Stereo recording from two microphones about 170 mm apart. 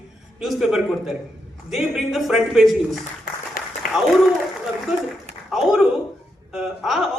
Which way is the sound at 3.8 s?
55° left (ahead or behind).